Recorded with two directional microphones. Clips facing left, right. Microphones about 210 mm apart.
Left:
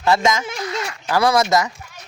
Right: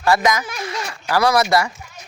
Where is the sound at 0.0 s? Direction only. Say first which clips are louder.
Even; 25° left (ahead or behind).